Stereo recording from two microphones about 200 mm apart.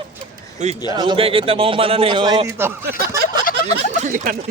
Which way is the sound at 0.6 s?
35° right (ahead or behind).